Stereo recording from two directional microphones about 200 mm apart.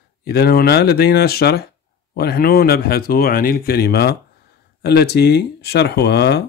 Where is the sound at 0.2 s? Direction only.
50° left (ahead or behind).